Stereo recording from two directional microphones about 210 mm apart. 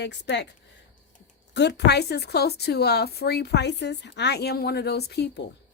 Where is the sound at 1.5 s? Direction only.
55° left (ahead or behind).